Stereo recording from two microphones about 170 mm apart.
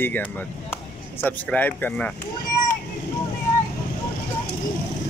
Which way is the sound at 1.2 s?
10° left (ahead or behind).